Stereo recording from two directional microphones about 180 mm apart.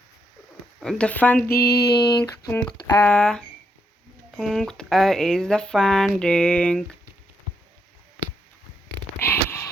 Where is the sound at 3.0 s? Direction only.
5° left (ahead or behind).